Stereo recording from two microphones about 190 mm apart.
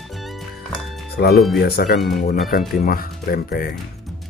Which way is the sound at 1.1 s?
55° left (ahead or behind).